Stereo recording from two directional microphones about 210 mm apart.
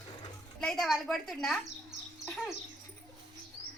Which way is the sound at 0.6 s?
Centre (ahead or behind).